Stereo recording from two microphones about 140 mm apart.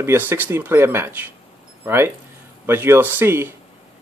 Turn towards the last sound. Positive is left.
turn(degrees=-15)  # may be behind; listen again after turning